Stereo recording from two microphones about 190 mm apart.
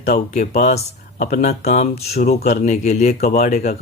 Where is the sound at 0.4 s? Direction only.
40° left (ahead or behind).